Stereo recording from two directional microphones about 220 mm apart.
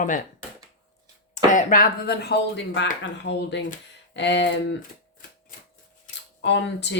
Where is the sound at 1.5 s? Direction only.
35° left (ahead or behind); by 4.6 s 55° left (ahead or behind).